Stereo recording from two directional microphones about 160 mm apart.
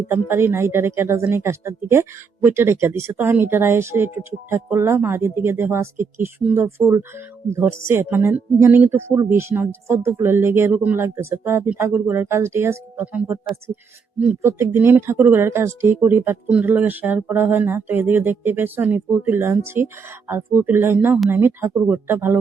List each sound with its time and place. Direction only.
0.1 s speech: 15° right (ahead or behind)